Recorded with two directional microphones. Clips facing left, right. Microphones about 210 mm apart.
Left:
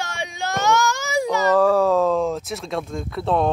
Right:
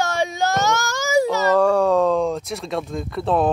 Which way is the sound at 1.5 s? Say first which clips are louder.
Even; centre (ahead or behind).